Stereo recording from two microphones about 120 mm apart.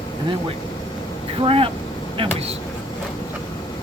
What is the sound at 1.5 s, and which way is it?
Speech, 50° right (ahead or behind).